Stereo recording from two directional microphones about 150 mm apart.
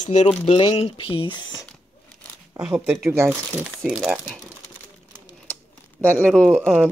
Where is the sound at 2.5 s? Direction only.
25° right (ahead or behind).